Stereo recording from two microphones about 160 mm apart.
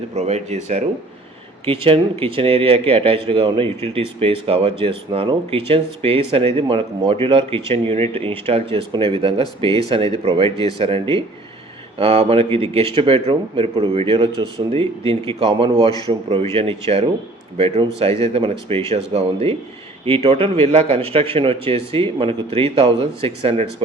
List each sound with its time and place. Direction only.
0.1 s a man's voice: 45° right (ahead or behind)